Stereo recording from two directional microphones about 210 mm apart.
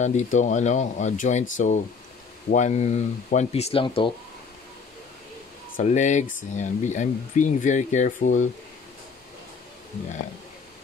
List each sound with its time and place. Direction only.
0.0 s speech: 35° left (ahead or behind)
5.8 s speech: 35° left (ahead or behind)